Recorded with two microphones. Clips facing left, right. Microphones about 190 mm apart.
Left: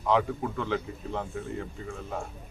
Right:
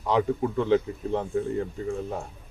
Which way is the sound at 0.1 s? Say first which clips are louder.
Right 2 dB; 30° right (ahead or behind).